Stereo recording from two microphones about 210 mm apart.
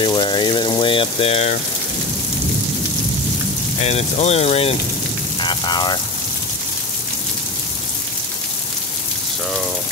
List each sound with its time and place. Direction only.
0.0 s speech: 20° left (ahead or behind)
3.8 s speech: 30° left (ahead or behind)
5.4 s rain on surface: 20° left (ahead or behind)